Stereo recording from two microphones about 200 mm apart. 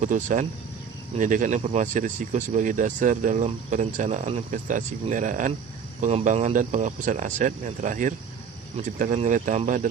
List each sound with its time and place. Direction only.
0.0 s speech: 40° right (ahead or behind)